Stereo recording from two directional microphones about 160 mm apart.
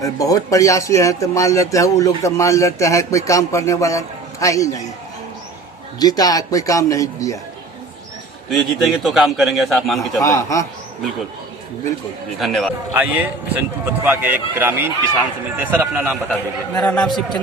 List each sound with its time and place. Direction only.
0.0 s speech: 20° left (ahead or behind)
6.0 s speech: 25° left (ahead or behind)
8.4 s a man's voice: centre (ahead or behind)
10.2 s speech: 20° left (ahead or behind)
12.4 s a man's voice: centre (ahead or behind)
12.9 s a man's voice: 10° right (ahead or behind)
16.3 s a man's voice: 10° left (ahead or behind)